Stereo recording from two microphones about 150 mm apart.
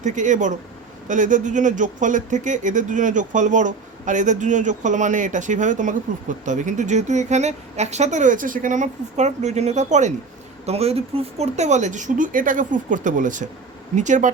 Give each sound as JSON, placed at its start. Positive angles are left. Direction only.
{"t": 0.0, "sound": "speech", "side_deg": -55}